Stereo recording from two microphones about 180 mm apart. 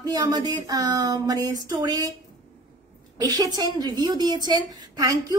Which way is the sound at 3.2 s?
20° right (ahead or behind).